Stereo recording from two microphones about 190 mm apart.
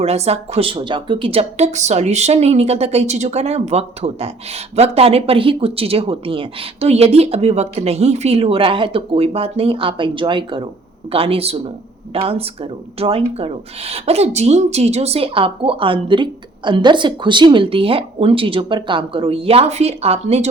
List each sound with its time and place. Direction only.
0.0 s speech: 35° right (ahead or behind)